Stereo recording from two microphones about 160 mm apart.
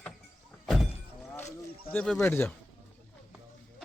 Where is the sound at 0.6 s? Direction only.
Centre (ahead or behind).